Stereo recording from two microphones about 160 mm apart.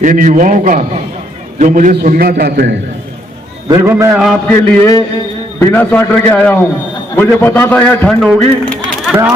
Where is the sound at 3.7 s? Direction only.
15° right (ahead or behind).